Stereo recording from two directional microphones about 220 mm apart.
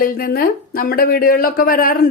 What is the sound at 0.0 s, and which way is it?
A woman's voice, 40° left (ahead or behind).